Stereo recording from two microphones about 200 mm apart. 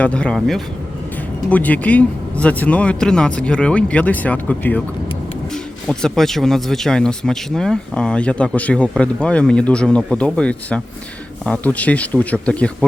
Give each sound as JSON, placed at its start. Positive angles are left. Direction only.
{"t": 0.0, "sound": "speech", "side_deg": 5}
{"t": 5.9, "sound": "speech", "side_deg": 5}